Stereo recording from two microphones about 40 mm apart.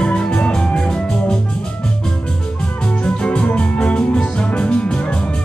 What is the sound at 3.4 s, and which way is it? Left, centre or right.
Music, left.